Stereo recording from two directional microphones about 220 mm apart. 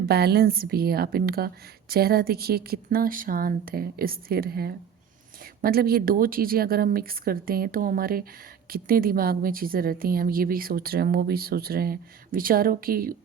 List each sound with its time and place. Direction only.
0.0 s a woman's voice: 45° right (ahead or behind)